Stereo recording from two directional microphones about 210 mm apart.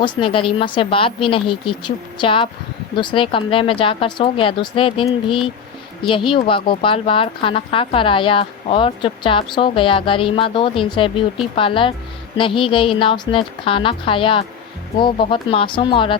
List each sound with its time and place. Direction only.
0.0 s speech: 25° left (ahead or behind)